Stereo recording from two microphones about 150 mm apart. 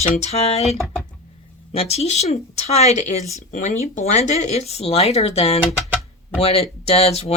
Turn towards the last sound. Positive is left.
turn(degrees=40)  # may be behind; listen again after turning